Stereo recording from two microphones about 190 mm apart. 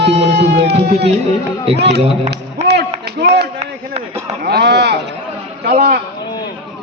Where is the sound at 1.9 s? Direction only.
35° right (ahead or behind).